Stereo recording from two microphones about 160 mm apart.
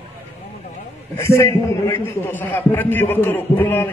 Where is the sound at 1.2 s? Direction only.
15° left (ahead or behind).